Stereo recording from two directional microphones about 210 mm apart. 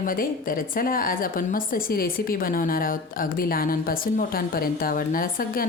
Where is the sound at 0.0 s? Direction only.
40° left (ahead or behind).